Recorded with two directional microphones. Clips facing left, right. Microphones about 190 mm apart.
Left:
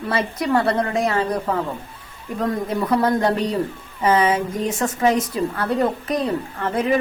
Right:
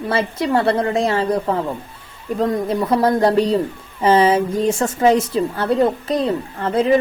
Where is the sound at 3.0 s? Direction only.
35° right (ahead or behind).